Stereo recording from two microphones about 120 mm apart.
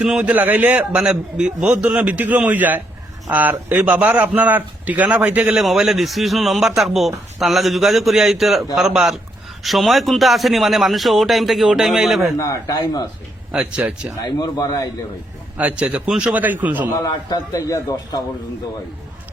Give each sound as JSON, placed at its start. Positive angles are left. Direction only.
{"t": 0.0, "sound": "a man's voice", "side_deg": -10}
{"t": 12.4, "sound": "a man's voice", "side_deg": 30}
{"t": 13.5, "sound": "a man's voice", "side_deg": -5}
{"t": 14.3, "sound": "a man's voice", "side_deg": 35}
{"t": 15.5, "sound": "a man's voice", "side_deg": -10}
{"t": 17.0, "sound": "a man's voice", "side_deg": 35}